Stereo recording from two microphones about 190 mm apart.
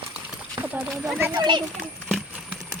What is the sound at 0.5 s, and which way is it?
Speech, 10° right (ahead or behind).